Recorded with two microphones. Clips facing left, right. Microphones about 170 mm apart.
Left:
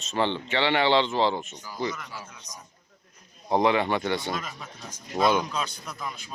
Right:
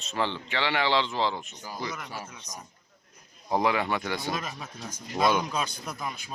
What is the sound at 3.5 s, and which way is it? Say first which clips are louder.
Speech: left 3 dB; 25° left (ahead or behind).